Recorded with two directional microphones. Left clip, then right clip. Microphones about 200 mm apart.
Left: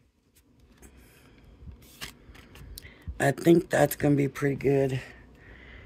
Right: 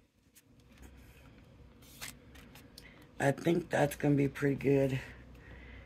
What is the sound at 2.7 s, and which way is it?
Speech, 50° left (ahead or behind).